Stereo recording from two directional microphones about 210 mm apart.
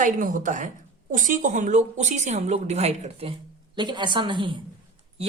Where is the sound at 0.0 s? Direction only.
40° right (ahead or behind).